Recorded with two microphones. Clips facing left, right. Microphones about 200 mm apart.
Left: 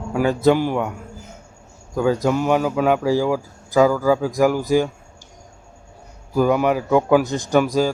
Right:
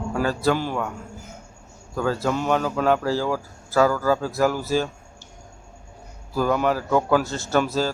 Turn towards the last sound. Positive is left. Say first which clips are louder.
# left 5 dB
turn(degrees=15)  # may be behind; listen again after turning